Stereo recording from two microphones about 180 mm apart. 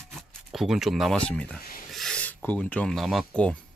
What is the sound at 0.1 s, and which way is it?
Speech, centre (ahead or behind).